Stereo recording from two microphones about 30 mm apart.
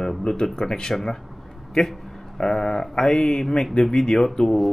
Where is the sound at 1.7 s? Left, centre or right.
Centre.